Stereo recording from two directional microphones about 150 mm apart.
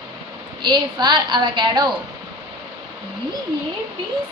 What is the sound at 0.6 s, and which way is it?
A woman's voice, 30° right (ahead or behind).